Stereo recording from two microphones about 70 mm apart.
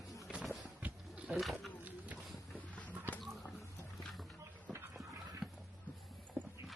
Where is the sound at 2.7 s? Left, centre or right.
Left.